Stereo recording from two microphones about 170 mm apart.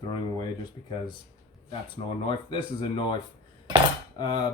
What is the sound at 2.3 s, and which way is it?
Speech, 30° left (ahead or behind).